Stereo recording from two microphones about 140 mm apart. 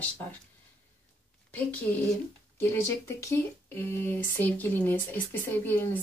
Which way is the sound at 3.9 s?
15° left (ahead or behind).